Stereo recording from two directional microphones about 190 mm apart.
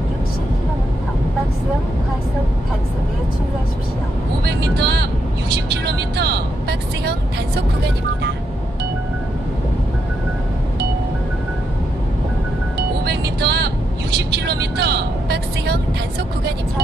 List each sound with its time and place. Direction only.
4.5 s vehicle: 60° right (ahead or behind)
13.0 s music: 60° right (ahead or behind)
14.1 s vehicle: 60° right (ahead or behind)